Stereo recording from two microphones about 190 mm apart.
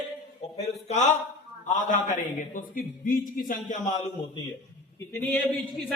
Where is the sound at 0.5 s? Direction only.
35° left (ahead or behind).